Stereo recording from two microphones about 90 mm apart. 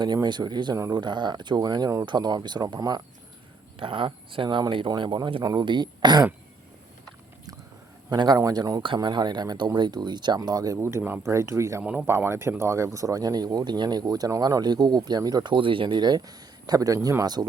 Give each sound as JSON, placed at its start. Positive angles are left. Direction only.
{"t": 0.0, "sound": "speech", "side_deg": -55}
{"t": 3.8, "sound": "speech", "side_deg": -65}
{"t": 4.4, "sound": "speech", "side_deg": -55}
{"t": 8.1, "sound": "speech", "side_deg": -55}
{"t": 8.4, "sound": "speech", "side_deg": -40}
{"t": 10.8, "sound": "speech", "side_deg": -25}
{"t": 11.8, "sound": "speech", "side_deg": -20}